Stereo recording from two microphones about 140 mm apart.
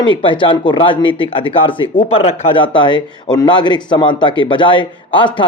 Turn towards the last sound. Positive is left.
turn(degrees=35)  # may be behind; listen again after turning